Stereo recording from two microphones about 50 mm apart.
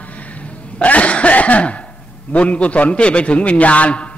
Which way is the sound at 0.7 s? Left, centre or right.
Left.